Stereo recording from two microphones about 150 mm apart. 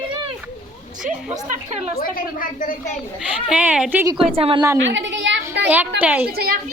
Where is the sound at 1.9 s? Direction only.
70° left (ahead or behind).